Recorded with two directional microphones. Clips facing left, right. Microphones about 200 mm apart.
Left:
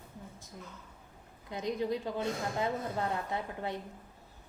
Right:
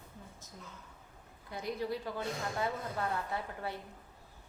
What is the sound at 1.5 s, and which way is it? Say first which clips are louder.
A woman's voice: left 4 dB; 20° left (ahead or behind).